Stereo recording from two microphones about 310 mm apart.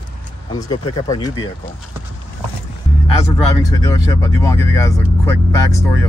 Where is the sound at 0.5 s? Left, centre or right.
Centre.